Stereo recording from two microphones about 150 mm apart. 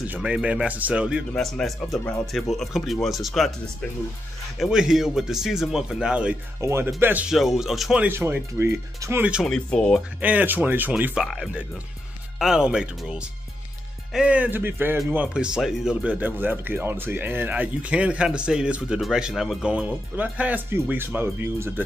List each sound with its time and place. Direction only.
0.0 s speech: 10° right (ahead or behind)
4.6 s speech: 5° right (ahead or behind)
6.6 s speech: 15° right (ahead or behind)
9.5 s speech: 5° left (ahead or behind)
10.2 s speech: 10° right (ahead or behind)